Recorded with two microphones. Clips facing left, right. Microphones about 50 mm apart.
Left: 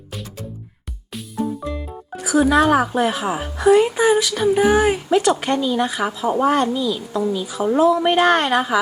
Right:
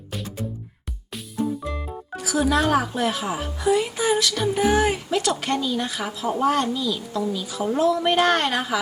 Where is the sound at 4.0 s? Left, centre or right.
Centre.